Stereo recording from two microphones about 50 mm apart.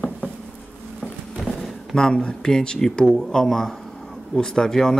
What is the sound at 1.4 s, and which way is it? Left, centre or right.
Speech, centre.